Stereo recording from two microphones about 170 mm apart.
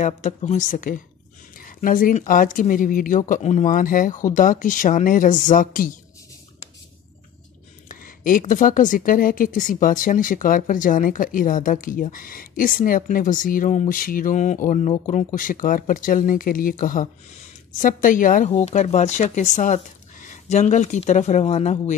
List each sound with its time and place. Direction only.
0.0 s speech: 45° left (ahead or behind)
7.9 s speech: 55° left (ahead or behind)